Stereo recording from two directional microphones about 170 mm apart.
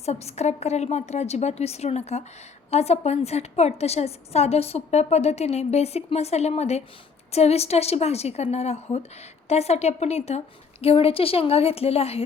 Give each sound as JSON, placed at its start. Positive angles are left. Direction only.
{"t": 0.0, "sound": "a woman's voice", "side_deg": 40}